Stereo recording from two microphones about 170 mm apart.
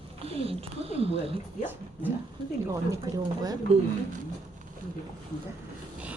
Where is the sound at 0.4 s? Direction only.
35° right (ahead or behind).